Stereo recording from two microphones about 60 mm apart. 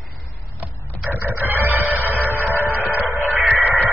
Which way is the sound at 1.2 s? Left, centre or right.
Right.